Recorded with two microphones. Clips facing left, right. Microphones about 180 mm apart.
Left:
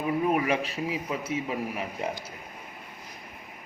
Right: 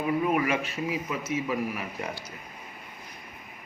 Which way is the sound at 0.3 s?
30° left (ahead or behind).